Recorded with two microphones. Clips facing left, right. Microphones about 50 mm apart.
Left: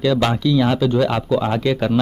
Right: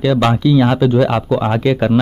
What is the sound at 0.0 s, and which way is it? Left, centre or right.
Speech, centre.